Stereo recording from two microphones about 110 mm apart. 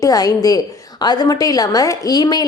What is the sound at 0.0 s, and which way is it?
A woman's voice, 35° left (ahead or behind).